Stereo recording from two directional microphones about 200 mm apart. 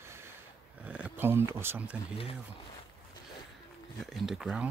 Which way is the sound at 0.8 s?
5° right (ahead or behind).